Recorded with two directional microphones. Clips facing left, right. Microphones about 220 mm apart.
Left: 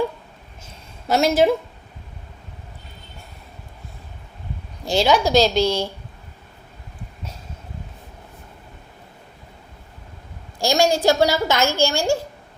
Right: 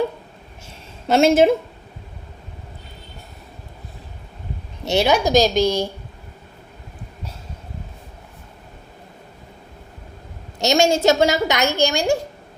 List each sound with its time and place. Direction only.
1.0 s a woman's voice: 25° right (ahead or behind)
4.9 s a woman's voice: 65° right (ahead or behind)
5.1 s a woman's voice: 15° right (ahead or behind)
10.6 s a woman's voice: 25° right (ahead or behind)